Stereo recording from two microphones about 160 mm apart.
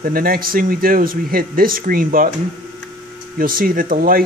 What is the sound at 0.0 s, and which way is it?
Speech, 65° right (ahead or behind).